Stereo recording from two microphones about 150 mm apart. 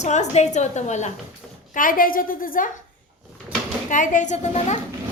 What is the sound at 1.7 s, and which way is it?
A woman's voice, 70° left (ahead or behind).